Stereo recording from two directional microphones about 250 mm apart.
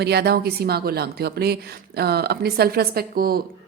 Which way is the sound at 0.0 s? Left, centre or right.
Right.